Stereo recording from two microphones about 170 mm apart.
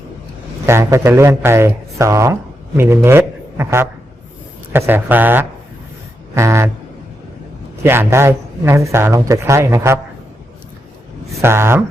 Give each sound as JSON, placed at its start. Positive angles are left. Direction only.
{"t": 0.6, "sound": "a man's voice", "side_deg": -15}
{"t": 7.9, "sound": "speech", "side_deg": -15}
{"t": 11.3, "sound": "speech", "side_deg": -15}